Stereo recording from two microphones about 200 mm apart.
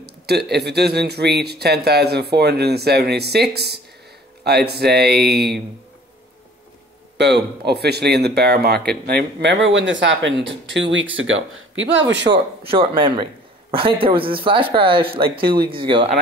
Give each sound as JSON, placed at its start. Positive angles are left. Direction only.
{"t": 0.0, "sound": "speech", "side_deg": -55}
{"t": 7.2, "sound": "speech", "side_deg": -60}
{"t": 12.6, "sound": "speech", "side_deg": -25}
{"t": 15.4, "sound": "speech", "side_deg": -50}
{"t": 15.8, "sound": "speech", "side_deg": -25}